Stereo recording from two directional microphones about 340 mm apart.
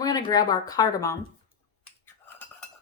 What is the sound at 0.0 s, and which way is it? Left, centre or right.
Speech, centre.